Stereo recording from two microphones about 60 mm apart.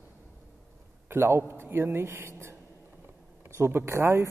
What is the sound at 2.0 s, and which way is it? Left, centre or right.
Speech, right.